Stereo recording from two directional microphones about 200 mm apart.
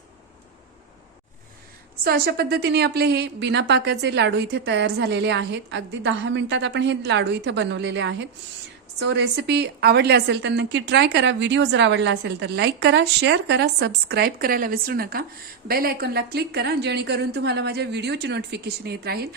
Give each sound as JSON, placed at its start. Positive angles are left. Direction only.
{"t": 2.0, "sound": "a woman's voice", "side_deg": -50}